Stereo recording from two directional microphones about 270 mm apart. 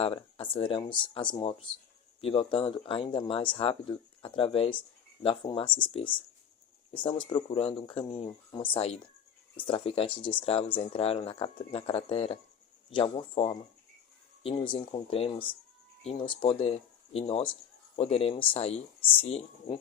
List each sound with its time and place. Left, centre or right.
0.0 s speech: centre